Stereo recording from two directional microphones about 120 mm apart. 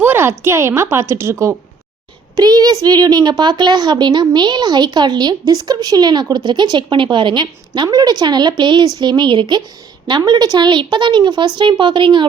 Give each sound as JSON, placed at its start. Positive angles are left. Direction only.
{"t": 0.0, "sound": "a woman's voice", "side_deg": -15}